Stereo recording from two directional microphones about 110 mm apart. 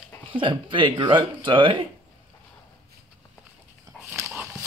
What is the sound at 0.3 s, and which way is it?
Speech, 50° right (ahead or behind).